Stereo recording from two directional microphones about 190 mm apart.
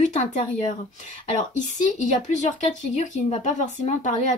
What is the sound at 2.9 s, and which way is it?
A woman's voice, 35° left (ahead or behind).